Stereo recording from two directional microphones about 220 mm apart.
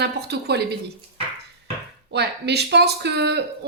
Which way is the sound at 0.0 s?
50° right (ahead or behind).